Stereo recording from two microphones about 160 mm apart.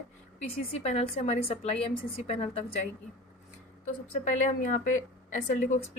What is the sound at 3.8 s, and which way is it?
A woman's voice, 50° left (ahead or behind).